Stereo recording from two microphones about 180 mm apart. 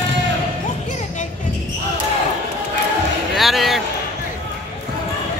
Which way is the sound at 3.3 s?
Centre (ahead or behind).